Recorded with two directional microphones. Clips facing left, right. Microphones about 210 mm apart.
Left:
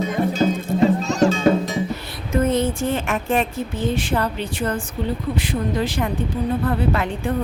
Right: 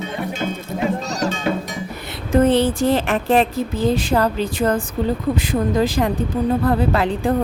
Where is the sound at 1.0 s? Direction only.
40° right (ahead or behind).